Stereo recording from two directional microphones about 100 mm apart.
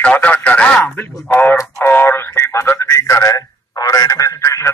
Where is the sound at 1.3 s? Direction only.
20° left (ahead or behind).